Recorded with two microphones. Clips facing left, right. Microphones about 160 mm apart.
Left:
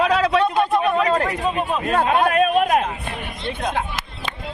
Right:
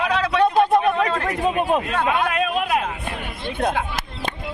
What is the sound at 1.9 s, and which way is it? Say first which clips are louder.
Speech: left 3 dB; 40° left (ahead or behind).